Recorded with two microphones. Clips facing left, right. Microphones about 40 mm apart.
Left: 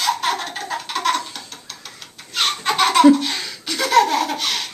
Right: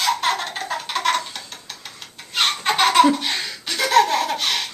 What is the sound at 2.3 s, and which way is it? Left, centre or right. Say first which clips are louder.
Laughter: even; centre.